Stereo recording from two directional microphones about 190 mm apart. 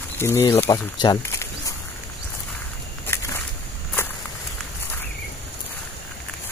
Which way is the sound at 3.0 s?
15° left (ahead or behind).